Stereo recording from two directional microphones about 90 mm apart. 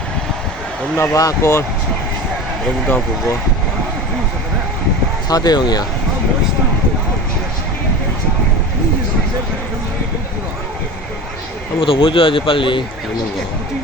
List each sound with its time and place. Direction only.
0.9 s speech: 35° left (ahead or behind)
5.3 s speech: 45° left (ahead or behind)
11.8 s speech: 80° left